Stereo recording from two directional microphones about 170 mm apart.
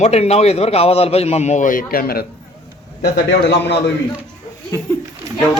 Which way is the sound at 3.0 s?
80° left.